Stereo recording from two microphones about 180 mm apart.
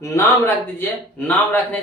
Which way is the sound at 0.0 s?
15° left (ahead or behind).